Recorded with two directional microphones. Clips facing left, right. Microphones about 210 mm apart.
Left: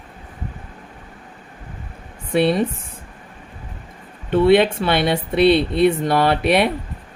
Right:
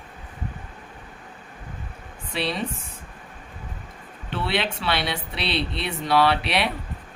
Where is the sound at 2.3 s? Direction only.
55° left (ahead or behind).